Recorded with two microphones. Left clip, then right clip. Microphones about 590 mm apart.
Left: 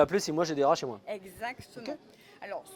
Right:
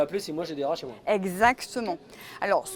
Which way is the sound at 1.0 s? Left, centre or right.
Right.